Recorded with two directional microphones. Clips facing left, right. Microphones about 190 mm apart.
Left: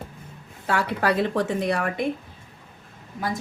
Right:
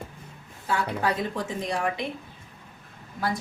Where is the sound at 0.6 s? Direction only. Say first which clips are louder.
Left 3 dB; 70° left (ahead or behind).